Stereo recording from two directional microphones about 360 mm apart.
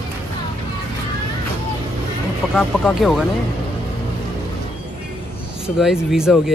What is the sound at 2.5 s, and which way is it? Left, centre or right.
Speech, centre.